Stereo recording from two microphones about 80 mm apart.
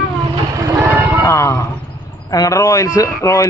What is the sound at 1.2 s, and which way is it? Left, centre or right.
A man's voice, left.